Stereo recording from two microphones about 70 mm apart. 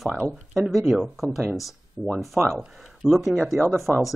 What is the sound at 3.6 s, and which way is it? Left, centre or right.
Speech, right.